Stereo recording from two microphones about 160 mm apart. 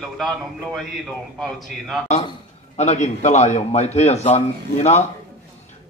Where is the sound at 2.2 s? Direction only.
40° left (ahead or behind).